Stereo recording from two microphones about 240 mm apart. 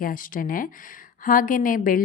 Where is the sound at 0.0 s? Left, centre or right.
Left.